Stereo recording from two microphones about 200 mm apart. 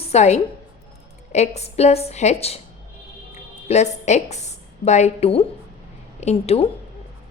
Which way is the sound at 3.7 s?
30° left (ahead or behind).